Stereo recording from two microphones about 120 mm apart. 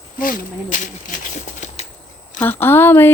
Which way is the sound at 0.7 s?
90° left.